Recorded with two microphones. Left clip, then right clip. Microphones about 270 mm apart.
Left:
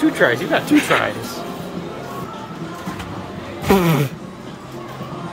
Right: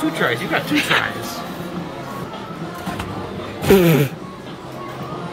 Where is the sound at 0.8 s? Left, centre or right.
Centre.